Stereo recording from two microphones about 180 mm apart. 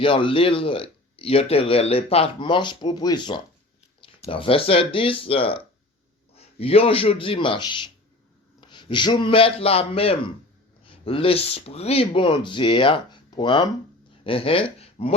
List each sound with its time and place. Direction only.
0.0 s speech: 30° left (ahead or behind)